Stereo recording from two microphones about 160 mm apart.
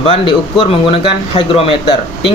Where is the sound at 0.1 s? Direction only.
35° left (ahead or behind).